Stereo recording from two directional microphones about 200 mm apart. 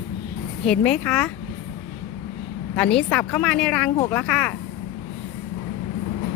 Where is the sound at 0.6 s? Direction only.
5° left (ahead or behind).